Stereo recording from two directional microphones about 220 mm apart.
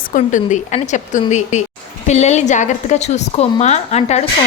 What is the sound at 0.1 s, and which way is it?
A woman's voice, 35° left (ahead or behind).